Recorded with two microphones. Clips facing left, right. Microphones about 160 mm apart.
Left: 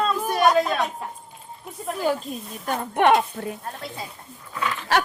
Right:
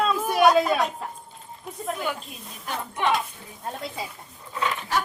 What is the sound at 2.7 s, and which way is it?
Speech, 60° left (ahead or behind).